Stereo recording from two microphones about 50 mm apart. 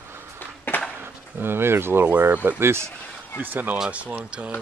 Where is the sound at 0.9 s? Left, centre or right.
Right.